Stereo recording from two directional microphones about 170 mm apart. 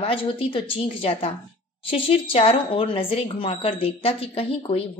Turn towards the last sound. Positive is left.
turn(degrees=35)  # may be behind; listen again after turning